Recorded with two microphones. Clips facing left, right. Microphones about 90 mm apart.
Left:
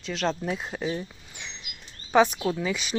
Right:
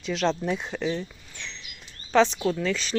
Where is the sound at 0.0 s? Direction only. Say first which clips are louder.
Right 3 dB; centre (ahead or behind).